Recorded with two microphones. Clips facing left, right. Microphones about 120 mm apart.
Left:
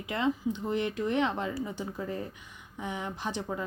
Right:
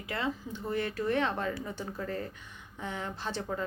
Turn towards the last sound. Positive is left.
turn(degrees=15)  # may be behind; listen again after turning